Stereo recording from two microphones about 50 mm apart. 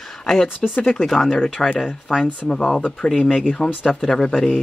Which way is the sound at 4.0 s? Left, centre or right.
Centre.